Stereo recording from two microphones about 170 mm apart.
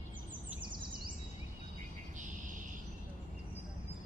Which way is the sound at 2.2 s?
50° right (ahead or behind).